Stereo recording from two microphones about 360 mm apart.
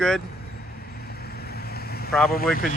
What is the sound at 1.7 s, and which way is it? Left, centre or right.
Vehicle, left.